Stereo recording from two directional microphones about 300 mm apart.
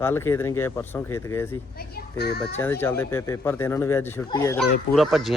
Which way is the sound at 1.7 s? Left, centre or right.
Left.